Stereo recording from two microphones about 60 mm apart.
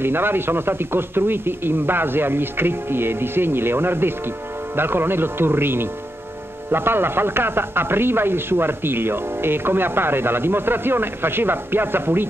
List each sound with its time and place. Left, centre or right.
0.0 s speech: right